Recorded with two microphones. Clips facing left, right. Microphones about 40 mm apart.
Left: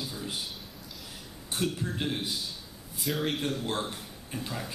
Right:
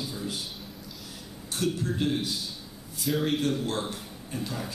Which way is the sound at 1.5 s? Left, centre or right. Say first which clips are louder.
Right 3 dB; centre.